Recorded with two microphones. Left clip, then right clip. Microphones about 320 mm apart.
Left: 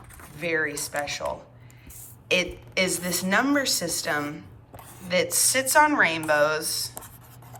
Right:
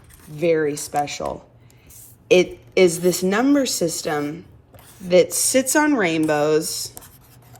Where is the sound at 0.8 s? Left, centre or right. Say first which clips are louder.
Right 6 dB; centre.